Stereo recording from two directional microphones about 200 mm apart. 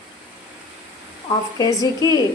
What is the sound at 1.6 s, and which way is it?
Speech, 15° left (ahead or behind).